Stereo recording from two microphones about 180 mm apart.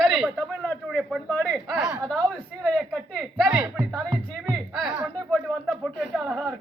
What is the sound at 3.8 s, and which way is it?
Music, 20° right (ahead or behind).